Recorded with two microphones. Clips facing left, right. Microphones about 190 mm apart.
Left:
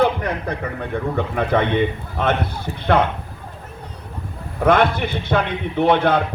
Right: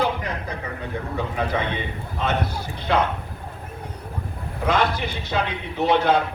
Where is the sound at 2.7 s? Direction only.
40° left (ahead or behind).